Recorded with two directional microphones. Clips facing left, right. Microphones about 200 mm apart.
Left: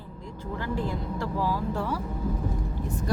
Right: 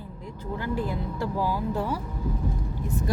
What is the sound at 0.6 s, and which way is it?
Speech, 5° right (ahead or behind).